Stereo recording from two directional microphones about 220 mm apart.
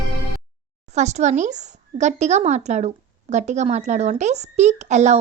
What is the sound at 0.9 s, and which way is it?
A woman's voice, 30° right (ahead or behind).